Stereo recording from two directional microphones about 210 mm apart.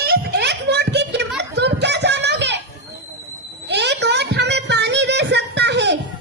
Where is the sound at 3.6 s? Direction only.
55° right (ahead or behind).